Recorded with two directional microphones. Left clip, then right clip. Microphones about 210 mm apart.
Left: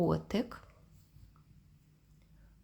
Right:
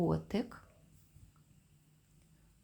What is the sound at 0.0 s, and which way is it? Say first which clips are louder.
Speech: left 3 dB; 10° left (ahead or behind).